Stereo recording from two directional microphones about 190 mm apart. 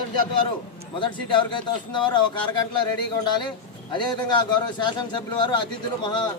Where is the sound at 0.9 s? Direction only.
25° left (ahead or behind).